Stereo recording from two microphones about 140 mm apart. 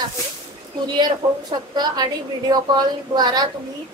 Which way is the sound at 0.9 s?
30° right (ahead or behind).